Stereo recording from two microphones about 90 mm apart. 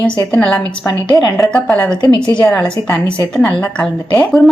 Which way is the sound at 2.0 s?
60° left (ahead or behind).